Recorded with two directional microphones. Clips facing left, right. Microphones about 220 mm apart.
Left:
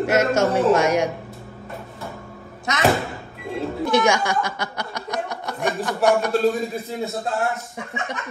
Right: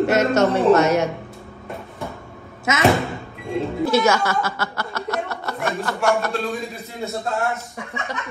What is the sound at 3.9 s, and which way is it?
Speech, 15° left (ahead or behind).